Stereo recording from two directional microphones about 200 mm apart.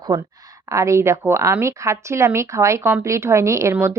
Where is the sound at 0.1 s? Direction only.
15° right (ahead or behind).